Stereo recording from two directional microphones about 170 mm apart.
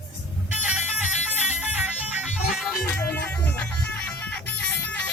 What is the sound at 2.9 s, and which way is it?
Music, 10° left (ahead or behind).